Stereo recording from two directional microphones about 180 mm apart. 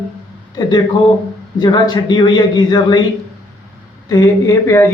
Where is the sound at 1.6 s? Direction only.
25° left (ahead or behind).